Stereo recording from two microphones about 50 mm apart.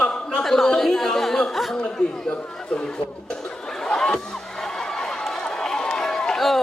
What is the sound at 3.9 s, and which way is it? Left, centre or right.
Crowd, centre.